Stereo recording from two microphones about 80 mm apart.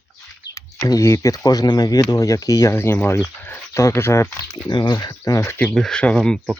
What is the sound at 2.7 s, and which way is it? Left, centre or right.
Speech, left.